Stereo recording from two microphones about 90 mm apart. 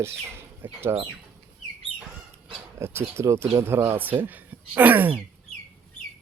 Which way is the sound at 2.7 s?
30° right (ahead or behind).